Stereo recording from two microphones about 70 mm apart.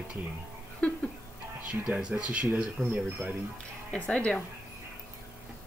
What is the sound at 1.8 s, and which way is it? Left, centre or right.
Speech, centre.